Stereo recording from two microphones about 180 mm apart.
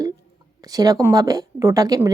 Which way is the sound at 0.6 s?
20° right (ahead or behind).